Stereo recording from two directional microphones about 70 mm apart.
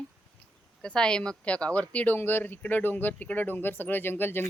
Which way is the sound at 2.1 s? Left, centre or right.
Left.